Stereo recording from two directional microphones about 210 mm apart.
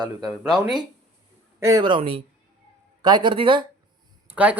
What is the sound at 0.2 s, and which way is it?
Speech, centre (ahead or behind).